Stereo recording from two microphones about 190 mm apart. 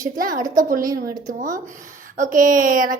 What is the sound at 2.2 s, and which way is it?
Speech, 45° right (ahead or behind).